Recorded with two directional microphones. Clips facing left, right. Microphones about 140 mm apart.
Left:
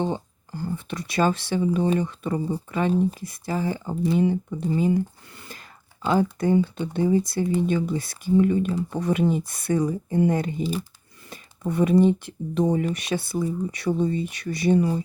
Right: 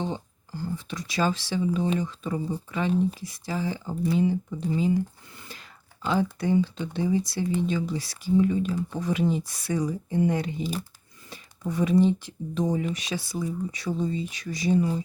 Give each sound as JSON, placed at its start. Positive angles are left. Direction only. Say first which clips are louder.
{"t": 0.0, "sound": "speech", "louder": "left 5 dB", "side_deg": 55}
{"t": 6.1, "sound": "speech", "louder": "left 4 dB", "side_deg": 45}